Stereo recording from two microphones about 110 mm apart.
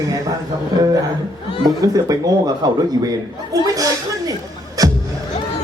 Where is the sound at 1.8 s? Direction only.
35° right (ahead or behind).